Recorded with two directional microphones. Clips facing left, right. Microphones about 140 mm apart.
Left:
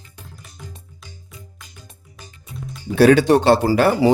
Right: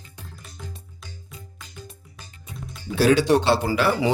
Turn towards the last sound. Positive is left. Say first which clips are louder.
# left 6 dB
turn(degrees=40)  # may be behind; listen again after turning